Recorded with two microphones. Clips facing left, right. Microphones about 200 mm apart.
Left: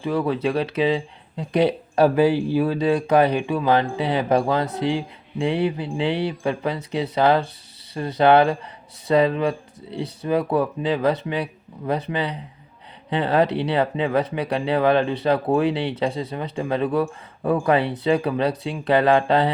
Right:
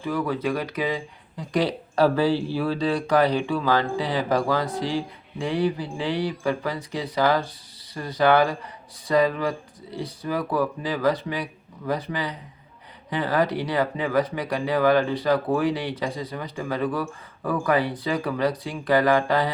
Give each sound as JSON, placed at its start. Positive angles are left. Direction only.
{"t": 0.0, "sound": "speech", "side_deg": 25}
{"t": 9.9, "sound": "speech", "side_deg": 65}
{"t": 10.2, "sound": "speech", "side_deg": 25}